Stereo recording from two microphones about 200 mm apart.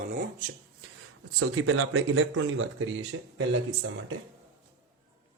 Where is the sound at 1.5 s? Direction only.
90° right; by 3.9 s 70° right (ahead or behind).